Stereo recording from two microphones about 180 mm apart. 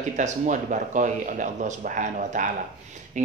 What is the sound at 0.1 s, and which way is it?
Speech, 45° right (ahead or behind).